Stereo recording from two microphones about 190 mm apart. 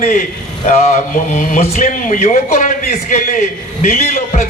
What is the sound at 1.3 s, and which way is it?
A man's voice, 40° left (ahead or behind).